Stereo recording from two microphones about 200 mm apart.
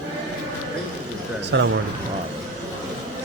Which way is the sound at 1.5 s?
65° right (ahead or behind).